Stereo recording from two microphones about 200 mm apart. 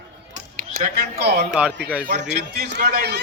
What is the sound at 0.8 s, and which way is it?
Speech, 50° right (ahead or behind).